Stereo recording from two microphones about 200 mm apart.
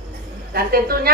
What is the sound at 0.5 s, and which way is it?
Speech, 50° right (ahead or behind).